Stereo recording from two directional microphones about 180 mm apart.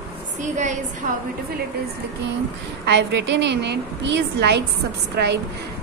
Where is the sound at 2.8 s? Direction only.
70° right (ahead or behind).